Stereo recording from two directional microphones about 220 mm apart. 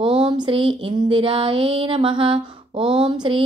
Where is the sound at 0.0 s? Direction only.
20° right (ahead or behind).